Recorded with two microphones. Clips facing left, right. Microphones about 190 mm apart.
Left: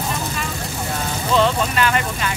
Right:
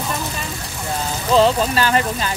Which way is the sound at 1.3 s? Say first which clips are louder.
Right 3 dB; 35° right (ahead or behind).